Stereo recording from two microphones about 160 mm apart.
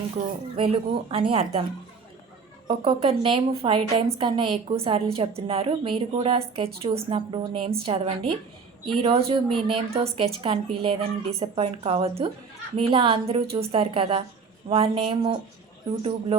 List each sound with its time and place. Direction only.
0.2 s speech: 50° right (ahead or behind)
0.5 s a woman's voice: 35° right (ahead or behind)
2.6 s a woman's voice: 35° right (ahead or behind)